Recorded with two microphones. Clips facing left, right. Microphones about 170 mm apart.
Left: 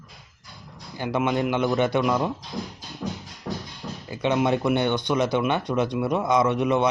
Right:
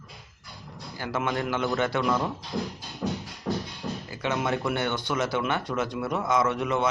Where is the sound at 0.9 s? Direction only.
20° left (ahead or behind).